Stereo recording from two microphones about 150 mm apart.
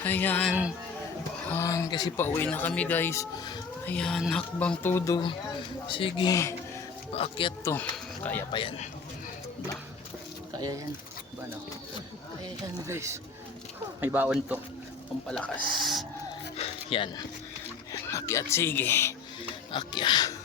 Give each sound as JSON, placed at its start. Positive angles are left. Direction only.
{"t": 0.0, "sound": "speech", "side_deg": 10}
{"t": 1.5, "sound": "speech", "side_deg": 15}
{"t": 2.1, "sound": "speech", "side_deg": 15}
{"t": 3.8, "sound": "speech", "side_deg": 5}
{"t": 5.1, "sound": "speech", "side_deg": 35}
{"t": 7.6, "sound": "speech", "side_deg": 15}
{"t": 12.9, "sound": "speech", "side_deg": -20}
{"t": 15.3, "sound": "speech", "side_deg": 5}
{"t": 16.6, "sound": "speech", "side_deg": 40}
{"t": 18.0, "sound": "speech", "side_deg": 20}
{"t": 19.7, "sound": "speech", "side_deg": 30}